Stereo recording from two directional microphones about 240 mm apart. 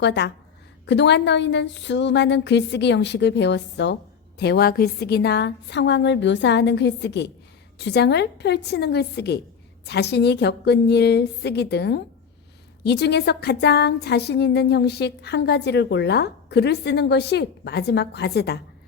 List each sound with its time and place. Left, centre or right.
0.0 s a woman's voice: left